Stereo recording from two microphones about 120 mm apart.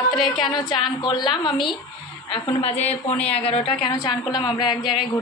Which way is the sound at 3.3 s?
55° left (ahead or behind).